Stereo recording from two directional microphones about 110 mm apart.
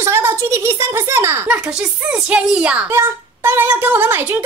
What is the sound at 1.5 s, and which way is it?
A woman's voice, 10° right (ahead or behind).